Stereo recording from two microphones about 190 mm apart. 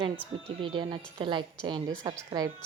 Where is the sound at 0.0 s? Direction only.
25° right (ahead or behind).